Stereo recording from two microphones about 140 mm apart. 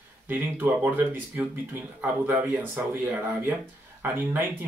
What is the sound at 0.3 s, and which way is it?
Speech, 15° right (ahead or behind).